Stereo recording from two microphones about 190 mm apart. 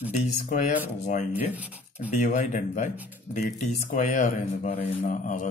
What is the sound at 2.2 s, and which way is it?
Speech, 40° left (ahead or behind).